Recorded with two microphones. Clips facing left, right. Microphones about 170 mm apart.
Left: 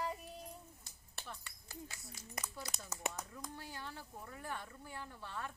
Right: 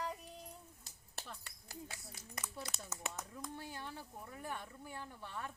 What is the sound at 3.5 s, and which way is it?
Speech, 20° right (ahead or behind).